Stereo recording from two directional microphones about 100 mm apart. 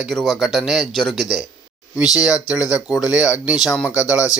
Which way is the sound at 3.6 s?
Centre (ahead or behind).